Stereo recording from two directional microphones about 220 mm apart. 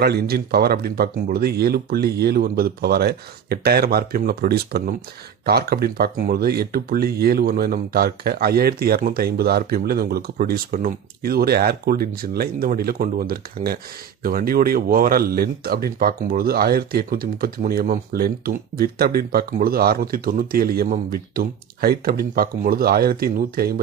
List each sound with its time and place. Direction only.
0.0 s speech: 45° right (ahead or behind)